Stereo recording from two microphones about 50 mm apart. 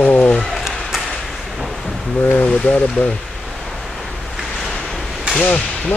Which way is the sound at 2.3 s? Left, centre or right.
Left.